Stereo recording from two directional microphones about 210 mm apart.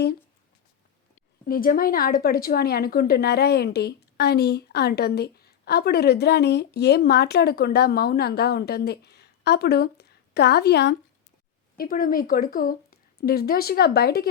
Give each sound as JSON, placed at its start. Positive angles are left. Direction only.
{"t": 1.5, "sound": "a woman's voice", "side_deg": 45}